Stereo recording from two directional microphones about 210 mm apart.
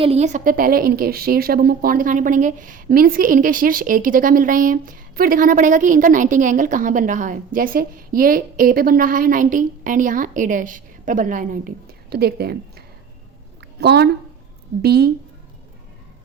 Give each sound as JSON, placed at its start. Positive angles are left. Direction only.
{"t": 0.0, "sound": "a woman's voice", "side_deg": -30}
{"t": 13.6, "sound": "a sound", "side_deg": -50}
{"t": 14.8, "sound": "a woman's voice", "side_deg": -50}